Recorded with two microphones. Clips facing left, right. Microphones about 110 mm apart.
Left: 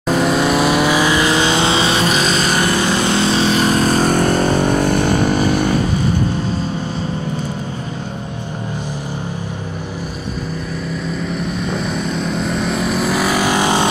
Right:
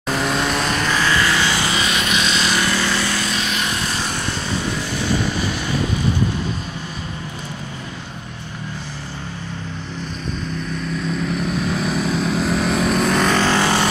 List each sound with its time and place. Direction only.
0.2 s vehicle: 5° left (ahead or behind); by 2.8 s 50° left (ahead or behind)
2.8 s vehicle: 20° left (ahead or behind); by 5.8 s 50° left (ahead or behind)
11.1 s vehicle: centre (ahead or behind); by 13.8 s 15° left (ahead or behind)